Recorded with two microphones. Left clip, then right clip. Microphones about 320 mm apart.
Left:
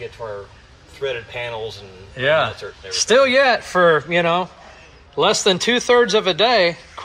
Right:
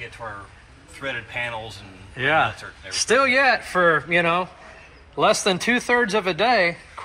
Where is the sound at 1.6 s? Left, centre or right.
Centre.